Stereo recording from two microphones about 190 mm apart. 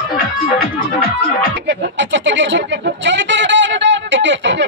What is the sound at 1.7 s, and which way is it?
Speech, 70° right (ahead or behind).